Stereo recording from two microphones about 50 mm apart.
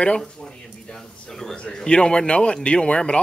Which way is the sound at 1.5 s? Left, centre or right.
Centre.